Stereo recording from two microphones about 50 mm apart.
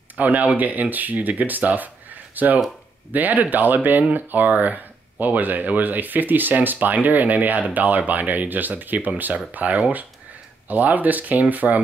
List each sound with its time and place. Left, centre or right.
0.1 s speech: right